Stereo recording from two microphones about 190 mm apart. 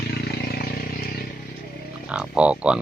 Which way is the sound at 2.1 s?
5° right (ahead or behind).